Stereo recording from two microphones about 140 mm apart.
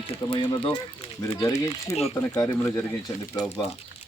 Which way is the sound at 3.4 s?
30° left (ahead or behind).